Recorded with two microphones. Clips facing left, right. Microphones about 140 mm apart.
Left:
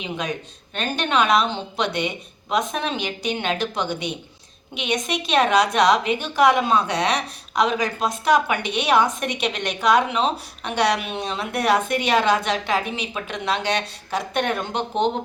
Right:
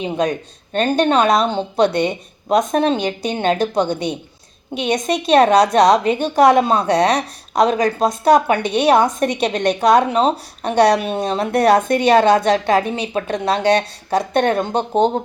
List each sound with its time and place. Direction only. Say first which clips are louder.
0.7 s a woman's voice: right 8 dB; 45° right (ahead or behind)